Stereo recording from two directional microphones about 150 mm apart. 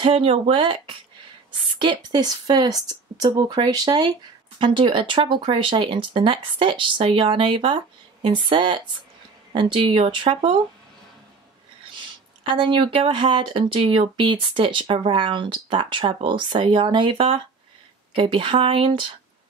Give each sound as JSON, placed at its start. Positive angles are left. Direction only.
{"t": 0.0, "sound": "speech", "side_deg": -40}
{"t": 12.5, "sound": "speech", "side_deg": -35}